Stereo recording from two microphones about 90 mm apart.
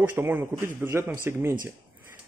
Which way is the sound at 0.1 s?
25° right (ahead or behind).